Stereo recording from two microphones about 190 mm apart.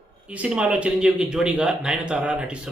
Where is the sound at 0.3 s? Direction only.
5° right (ahead or behind).